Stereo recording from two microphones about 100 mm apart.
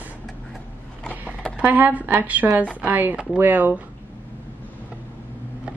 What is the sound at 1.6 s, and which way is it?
A woman's voice, 15° right (ahead or behind).